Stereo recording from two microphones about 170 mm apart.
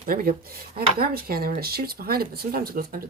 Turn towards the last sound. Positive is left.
turn(degrees=-60)  # may be behind; listen again after turning